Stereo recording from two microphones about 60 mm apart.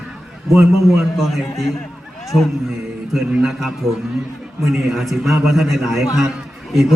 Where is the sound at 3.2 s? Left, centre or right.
Right.